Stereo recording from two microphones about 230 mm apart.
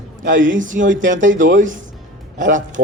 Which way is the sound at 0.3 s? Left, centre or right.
Right.